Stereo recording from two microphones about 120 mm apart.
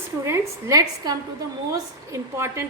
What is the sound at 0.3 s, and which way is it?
A woman's voice, 30° right (ahead or behind).